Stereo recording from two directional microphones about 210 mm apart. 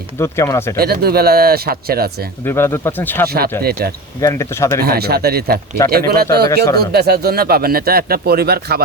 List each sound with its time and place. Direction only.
0.2 s speech: 15° left (ahead or behind)
0.8 s speech: 45° right (ahead or behind)
2.4 s speech: 10° left (ahead or behind)
3.6 s speech: 50° right (ahead or behind)
4.2 s speech: 15° left (ahead or behind)
4.8 s speech: 50° right (ahead or behind)